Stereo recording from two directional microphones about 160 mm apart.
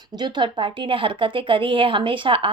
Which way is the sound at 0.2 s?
30° right (ahead or behind).